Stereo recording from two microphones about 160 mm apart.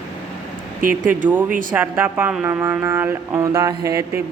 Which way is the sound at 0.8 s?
60° right (ahead or behind).